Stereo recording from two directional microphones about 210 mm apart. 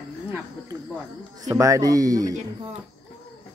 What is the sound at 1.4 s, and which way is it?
Speech, 15° right (ahead or behind).